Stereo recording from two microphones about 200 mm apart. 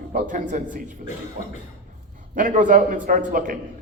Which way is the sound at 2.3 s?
40° right (ahead or behind).